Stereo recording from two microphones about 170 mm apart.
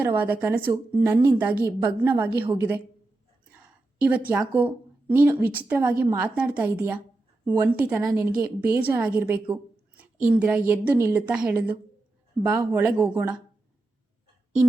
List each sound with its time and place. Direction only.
0.2 s a woman's voice: 10° right (ahead or behind)
3.5 s a sound: 5° right (ahead or behind)
4.3 s a woman's voice: 10° right (ahead or behind)
7.4 s speech: 20° right (ahead or behind)
7.8 s a woman's voice: 10° right (ahead or behind)